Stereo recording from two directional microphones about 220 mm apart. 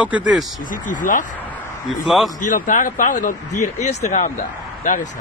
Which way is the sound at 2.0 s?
Centre (ahead or behind).